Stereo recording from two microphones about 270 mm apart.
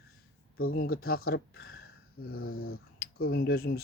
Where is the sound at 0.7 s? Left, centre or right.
Left.